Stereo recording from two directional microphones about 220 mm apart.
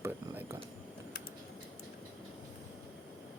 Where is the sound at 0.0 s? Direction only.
10° right (ahead or behind).